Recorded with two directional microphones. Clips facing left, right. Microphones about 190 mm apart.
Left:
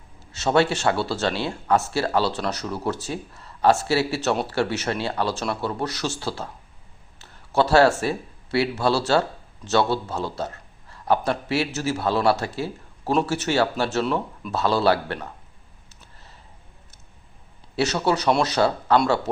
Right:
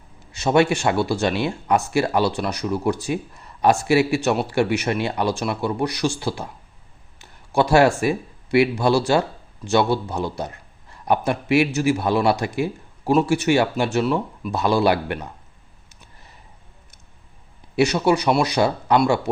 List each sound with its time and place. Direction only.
0.3 s a man's voice: 15° right (ahead or behind)
14.0 s speech: 5° right (ahead or behind)
14.5 s speech: 15° right (ahead or behind)
15.9 s a sound: 15° right (ahead or behind)
17.7 s speech: 15° right (ahead or behind)